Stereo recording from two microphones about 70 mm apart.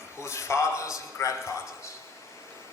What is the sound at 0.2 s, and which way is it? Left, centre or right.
A man's voice, left.